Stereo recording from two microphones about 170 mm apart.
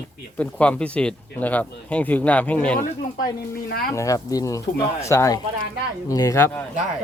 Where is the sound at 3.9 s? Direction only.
20° left (ahead or behind).